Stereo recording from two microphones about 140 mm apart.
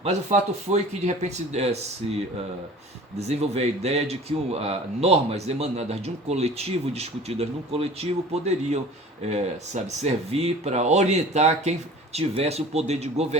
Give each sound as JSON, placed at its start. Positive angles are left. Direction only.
{"t": 0.0, "sound": "speech", "side_deg": -50}
{"t": 3.2, "sound": "speech", "side_deg": -50}